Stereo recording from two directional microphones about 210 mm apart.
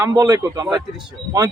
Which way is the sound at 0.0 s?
15° right (ahead or behind).